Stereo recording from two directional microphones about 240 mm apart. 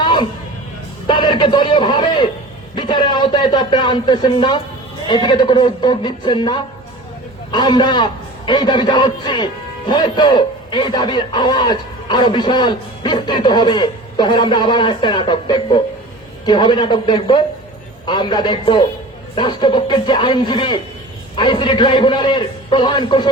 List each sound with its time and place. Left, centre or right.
0.0 s music: centre
1.0 s a man's voice: centre